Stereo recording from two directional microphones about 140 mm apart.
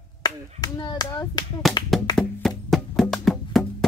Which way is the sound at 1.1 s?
30° left (ahead or behind).